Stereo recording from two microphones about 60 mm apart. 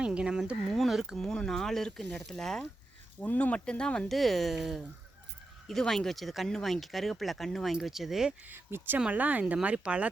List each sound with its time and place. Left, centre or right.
0.0 s speech: centre
0.7 s speech: centre
1.2 s speech: centre
3.2 s speech: left
4.1 s speech: centre
8.4 s speech: right
9.0 s speech: right